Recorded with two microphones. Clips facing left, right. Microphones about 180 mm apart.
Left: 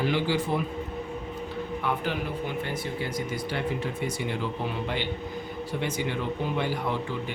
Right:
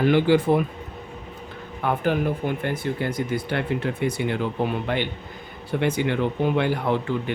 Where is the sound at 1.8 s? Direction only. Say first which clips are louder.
Right 9 dB; 50° right (ahead or behind).